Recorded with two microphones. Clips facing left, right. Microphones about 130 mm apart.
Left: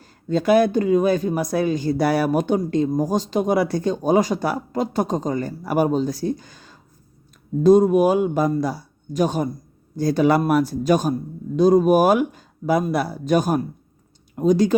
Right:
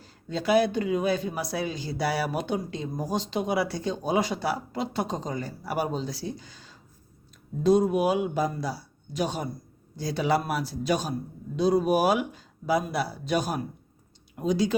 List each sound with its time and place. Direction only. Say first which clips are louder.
0.0 s speech: left 9 dB; 50° left (ahead or behind)